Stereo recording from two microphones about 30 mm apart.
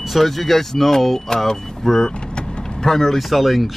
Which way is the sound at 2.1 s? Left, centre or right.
Left.